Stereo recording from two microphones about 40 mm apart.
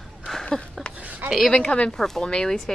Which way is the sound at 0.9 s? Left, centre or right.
Right.